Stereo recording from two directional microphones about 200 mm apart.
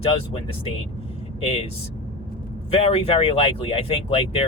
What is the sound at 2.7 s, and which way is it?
Speech, 30° left (ahead or behind).